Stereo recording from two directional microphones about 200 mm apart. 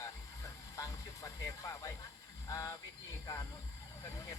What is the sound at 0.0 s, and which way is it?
Music, 15° left (ahead or behind).